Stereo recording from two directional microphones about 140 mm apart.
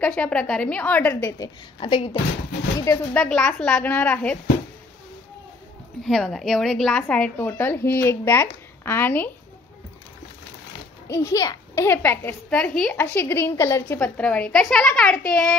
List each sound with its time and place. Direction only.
0.0 s speech: 10° left (ahead or behind)
1.4 s a woman's voice: 35° left (ahead or behind)
2.8 s speech: 20° left (ahead or behind)
3.2 s speech: 5° left (ahead or behind)
6.0 s speech: centre (ahead or behind)
11.1 s speech: 20° left (ahead or behind)
13.9 s a woman's voice: 10° left (ahead or behind)